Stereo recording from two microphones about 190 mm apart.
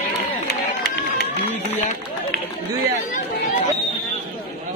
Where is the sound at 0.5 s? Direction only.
60° left (ahead or behind).